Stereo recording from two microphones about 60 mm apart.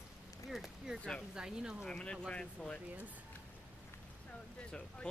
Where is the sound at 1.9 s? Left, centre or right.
Centre.